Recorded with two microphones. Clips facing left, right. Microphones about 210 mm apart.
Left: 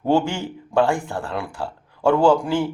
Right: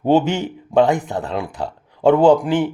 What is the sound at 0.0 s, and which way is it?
Speech, 20° right (ahead or behind).